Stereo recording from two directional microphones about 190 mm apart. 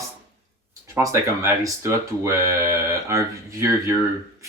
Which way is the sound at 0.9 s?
15° right (ahead or behind).